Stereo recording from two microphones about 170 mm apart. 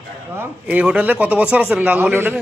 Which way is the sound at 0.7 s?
5° right (ahead or behind).